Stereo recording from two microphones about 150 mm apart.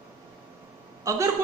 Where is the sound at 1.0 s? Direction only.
20° right (ahead or behind).